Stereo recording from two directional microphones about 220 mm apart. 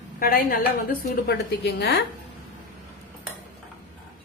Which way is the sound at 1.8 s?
45° left (ahead or behind).